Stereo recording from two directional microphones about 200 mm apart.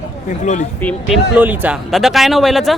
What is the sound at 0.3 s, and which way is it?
Speech, 35° left (ahead or behind).